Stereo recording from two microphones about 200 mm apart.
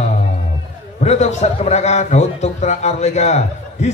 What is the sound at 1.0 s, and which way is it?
A man's voice, 35° left (ahead or behind).